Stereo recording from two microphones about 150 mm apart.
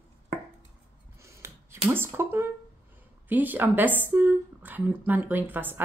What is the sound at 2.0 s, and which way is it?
Speech, 15° right (ahead or behind).